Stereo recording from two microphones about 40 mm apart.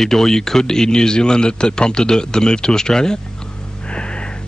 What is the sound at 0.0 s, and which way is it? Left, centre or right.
Speech, centre.